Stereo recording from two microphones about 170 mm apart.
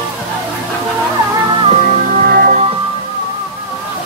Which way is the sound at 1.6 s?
45° right (ahead or behind).